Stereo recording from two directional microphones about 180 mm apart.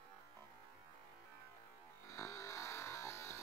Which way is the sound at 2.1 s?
15° left (ahead or behind).